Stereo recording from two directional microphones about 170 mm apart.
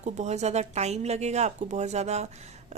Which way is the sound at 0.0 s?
40° right (ahead or behind).